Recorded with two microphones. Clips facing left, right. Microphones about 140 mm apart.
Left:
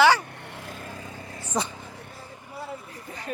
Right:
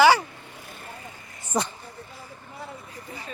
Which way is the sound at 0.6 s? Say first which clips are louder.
Left 3 dB; 90° left.